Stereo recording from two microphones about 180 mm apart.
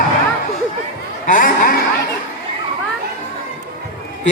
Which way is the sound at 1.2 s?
50° left (ahead or behind).